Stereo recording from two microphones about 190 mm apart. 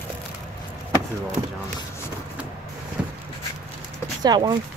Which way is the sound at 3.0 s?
5° right (ahead or behind).